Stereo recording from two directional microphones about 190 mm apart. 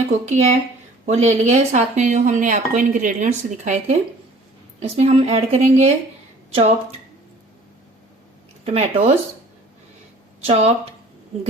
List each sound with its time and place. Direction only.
0.3 s a woman's voice: 35° right (ahead or behind)
8.6 s speech: 35° right (ahead or behind)
10.4 s speech: 30° right (ahead or behind)